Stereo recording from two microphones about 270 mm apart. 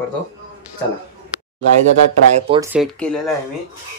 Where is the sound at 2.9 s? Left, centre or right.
Centre.